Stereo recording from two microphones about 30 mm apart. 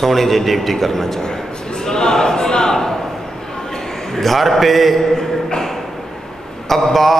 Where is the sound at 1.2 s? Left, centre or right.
Left.